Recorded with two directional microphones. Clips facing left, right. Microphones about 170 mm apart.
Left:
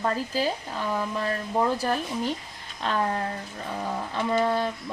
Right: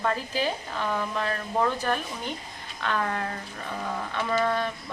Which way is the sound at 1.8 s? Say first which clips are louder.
Left 2 dB; 35° left (ahead or behind).